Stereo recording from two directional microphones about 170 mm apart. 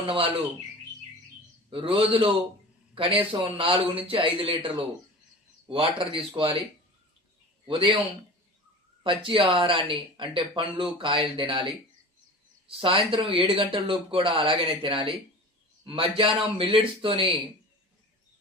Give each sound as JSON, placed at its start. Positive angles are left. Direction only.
{"t": 1.7, "sound": "speech", "side_deg": -35}
{"t": 7.7, "sound": "speech", "side_deg": -30}
{"t": 9.0, "sound": "speech", "side_deg": -30}
{"t": 12.6, "sound": "speech", "side_deg": -30}